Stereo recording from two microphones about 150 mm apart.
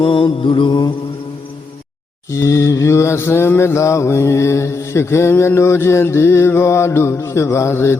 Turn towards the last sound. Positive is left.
turn(degrees=15)  # may be behind; listen again after turning